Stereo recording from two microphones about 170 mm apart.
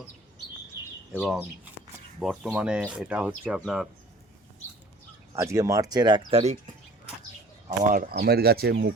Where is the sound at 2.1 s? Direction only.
Centre (ahead or behind).